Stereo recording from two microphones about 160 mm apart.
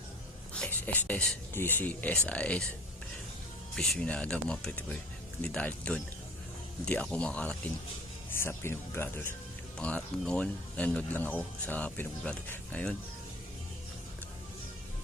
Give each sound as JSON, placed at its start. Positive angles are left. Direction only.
{"t": 0.5, "sound": "speech", "side_deg": 5}
{"t": 3.8, "sound": "speech", "side_deg": 5}